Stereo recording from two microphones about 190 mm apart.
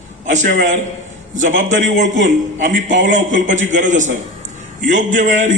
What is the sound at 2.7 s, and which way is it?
A man's voice, 40° right (ahead or behind).